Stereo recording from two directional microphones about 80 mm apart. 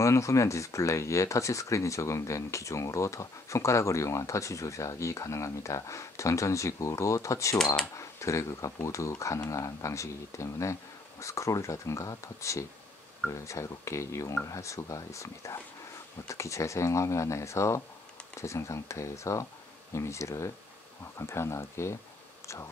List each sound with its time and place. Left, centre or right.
0.0 s speech: left